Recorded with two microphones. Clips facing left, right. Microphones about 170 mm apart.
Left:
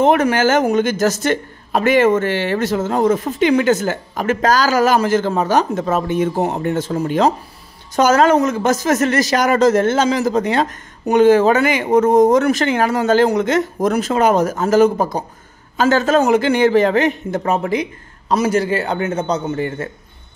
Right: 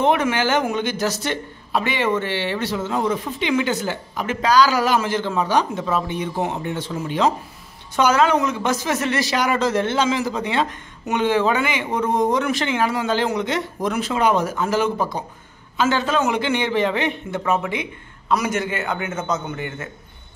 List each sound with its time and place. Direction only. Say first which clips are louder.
0.0 s a man's voice: left 5 dB; 45° left (ahead or behind)